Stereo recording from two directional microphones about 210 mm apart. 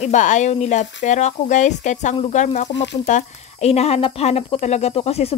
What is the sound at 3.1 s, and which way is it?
A woman's voice, 35° left (ahead or behind).